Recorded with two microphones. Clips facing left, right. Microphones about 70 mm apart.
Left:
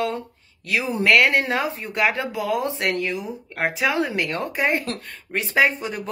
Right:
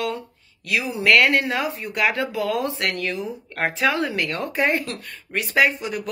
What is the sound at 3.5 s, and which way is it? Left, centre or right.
Speech, centre.